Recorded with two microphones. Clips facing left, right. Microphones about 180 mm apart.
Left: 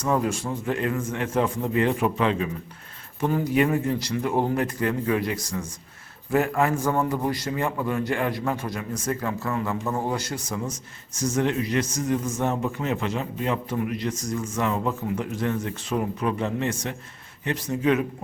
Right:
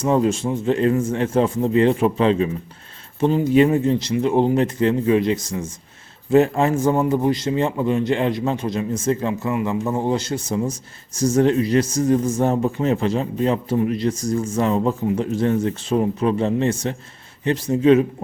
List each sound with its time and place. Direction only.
0.0 s a man's voice: 25° right (ahead or behind)